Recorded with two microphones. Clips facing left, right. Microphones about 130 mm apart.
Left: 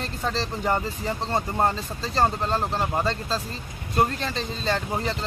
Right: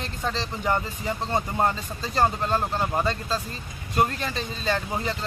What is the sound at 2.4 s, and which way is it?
Speech, 30° left (ahead or behind).